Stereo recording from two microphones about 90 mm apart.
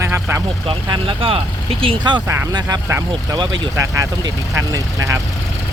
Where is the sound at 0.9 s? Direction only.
75° right (ahead or behind).